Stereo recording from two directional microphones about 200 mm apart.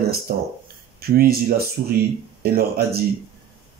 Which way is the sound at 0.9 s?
50° right (ahead or behind).